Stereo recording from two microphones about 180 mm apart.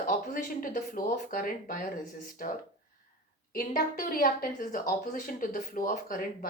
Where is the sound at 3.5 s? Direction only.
55° left (ahead or behind).